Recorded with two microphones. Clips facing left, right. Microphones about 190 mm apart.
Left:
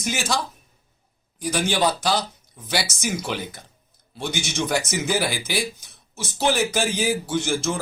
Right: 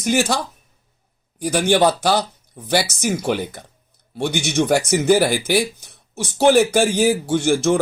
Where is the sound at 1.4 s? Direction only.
60° right (ahead or behind).